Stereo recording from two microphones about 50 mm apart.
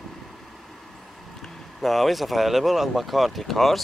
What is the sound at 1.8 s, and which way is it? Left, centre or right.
Speech, centre.